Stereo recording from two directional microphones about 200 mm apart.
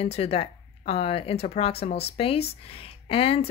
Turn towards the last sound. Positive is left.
turn(degrees=30)  # may be behind; listen again after turning